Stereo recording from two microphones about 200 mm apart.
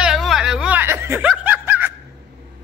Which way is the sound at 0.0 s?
Centre (ahead or behind).